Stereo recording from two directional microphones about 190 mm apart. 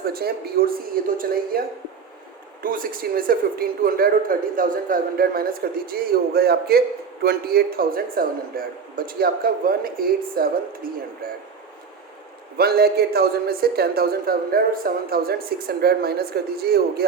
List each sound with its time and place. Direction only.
0.1 s a man's voice: 55° right (ahead or behind)
12.5 s a man's voice: 55° right (ahead or behind)